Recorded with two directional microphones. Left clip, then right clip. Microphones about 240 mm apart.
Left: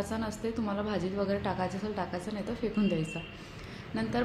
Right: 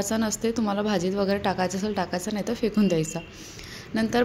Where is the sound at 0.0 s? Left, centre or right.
Right.